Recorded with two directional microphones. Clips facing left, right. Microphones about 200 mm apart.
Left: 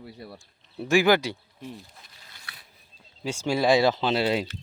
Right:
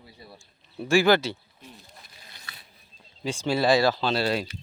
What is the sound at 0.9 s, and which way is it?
Speech, 15° left (ahead or behind).